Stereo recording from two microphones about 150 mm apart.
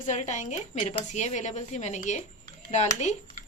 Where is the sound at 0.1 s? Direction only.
50° left (ahead or behind).